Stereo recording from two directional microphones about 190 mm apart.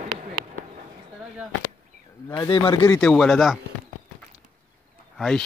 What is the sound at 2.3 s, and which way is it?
Speech, 25° left (ahead or behind).